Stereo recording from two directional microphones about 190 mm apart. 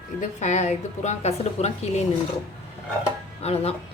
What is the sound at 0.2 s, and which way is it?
A woman's voice, 40° left (ahead or behind).